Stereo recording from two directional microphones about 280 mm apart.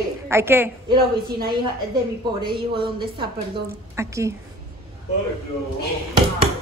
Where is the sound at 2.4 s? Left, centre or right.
Centre.